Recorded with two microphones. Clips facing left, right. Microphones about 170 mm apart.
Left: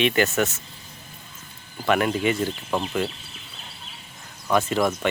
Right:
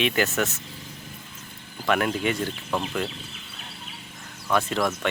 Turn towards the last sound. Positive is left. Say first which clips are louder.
# left 3 dB
turn(degrees=5)  # may be behind; listen again after turning